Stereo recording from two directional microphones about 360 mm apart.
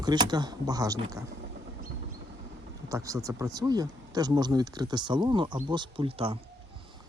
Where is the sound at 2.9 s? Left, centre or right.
Centre.